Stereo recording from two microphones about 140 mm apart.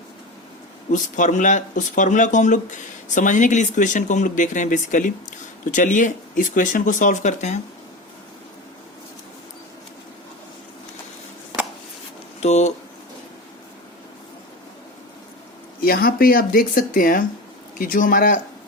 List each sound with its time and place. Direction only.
0.9 s speech: 65° left (ahead or behind)
12.4 s speech: 55° left (ahead or behind)
15.8 s speech: 90° left; by 18.3 s 70° left (ahead or behind)